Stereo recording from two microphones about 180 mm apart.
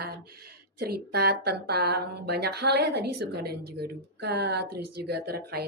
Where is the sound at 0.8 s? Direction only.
60° right (ahead or behind).